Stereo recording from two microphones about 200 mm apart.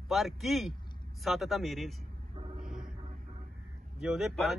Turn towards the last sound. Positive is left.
turn(degrees=0)  # may be behind; listen again after turning